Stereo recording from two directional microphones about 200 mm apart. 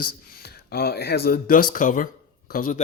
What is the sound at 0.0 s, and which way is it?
Speech, 50° left (ahead or behind).